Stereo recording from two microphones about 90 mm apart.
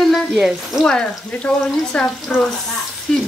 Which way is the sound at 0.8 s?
10° left (ahead or behind).